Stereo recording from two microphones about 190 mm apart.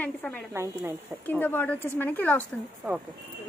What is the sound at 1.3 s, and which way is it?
A woman's voice, 10° left (ahead or behind).